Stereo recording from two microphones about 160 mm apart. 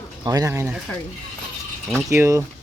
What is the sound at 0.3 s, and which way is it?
Speech, 20° right (ahead or behind).